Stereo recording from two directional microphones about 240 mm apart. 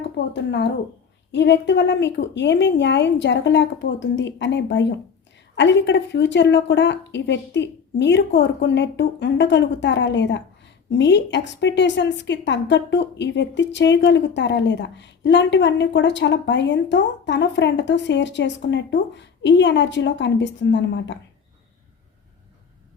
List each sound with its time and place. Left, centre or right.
0.3 s a woman's voice: left